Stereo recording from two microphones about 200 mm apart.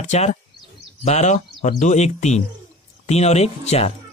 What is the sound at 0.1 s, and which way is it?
Speech, 35° left (ahead or behind).